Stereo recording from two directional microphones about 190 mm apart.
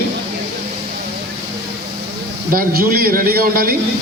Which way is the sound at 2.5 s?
50° right (ahead or behind).